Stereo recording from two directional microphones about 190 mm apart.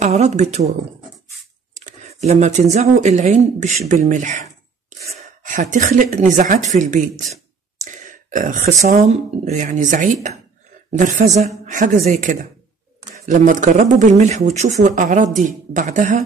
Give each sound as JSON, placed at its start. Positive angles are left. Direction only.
{"t": 0.0, "sound": "speech", "side_deg": -35}
{"t": 1.9, "sound": "speech", "side_deg": -35}